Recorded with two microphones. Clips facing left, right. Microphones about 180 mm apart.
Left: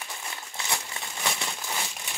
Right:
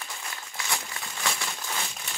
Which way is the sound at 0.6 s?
25° left (ahead or behind).